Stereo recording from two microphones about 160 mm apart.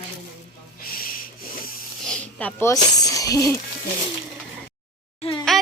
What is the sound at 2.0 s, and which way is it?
Snake, 5° left (ahead or behind).